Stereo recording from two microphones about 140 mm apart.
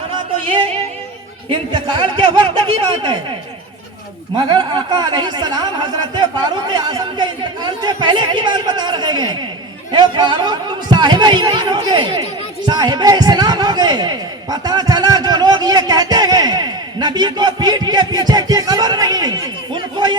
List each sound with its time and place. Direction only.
0.3 s music: 40° right (ahead or behind)
1.5 s speech: 35° right (ahead or behind)
4.4 s a man's voice: 35° right (ahead or behind)